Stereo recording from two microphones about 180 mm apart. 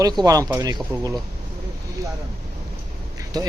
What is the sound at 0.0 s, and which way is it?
A man's voice, 20° right (ahead or behind).